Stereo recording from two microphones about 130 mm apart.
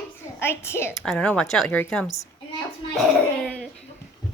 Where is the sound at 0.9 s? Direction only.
Centre (ahead or behind).